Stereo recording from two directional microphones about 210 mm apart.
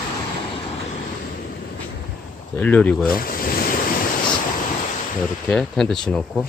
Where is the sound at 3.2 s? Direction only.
45° left (ahead or behind).